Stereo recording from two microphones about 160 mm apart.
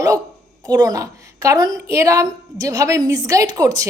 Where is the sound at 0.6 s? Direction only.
25° right (ahead or behind).